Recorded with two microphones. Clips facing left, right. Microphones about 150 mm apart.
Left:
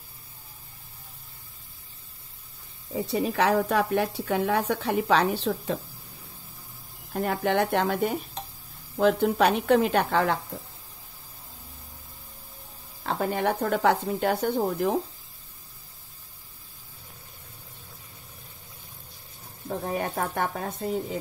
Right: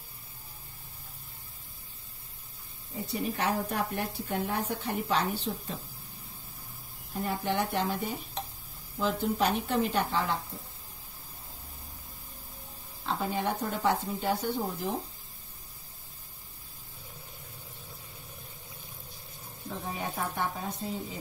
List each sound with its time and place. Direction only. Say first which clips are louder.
2.9 s a woman's voice: left 6 dB; 85° left
7.2 s speech: left 6 dB; 70° left (ahead or behind)
13.0 s speech: left 5 dB; 60° left (ahead or behind)
19.7 s speech: left 7 dB; 55° left (ahead or behind)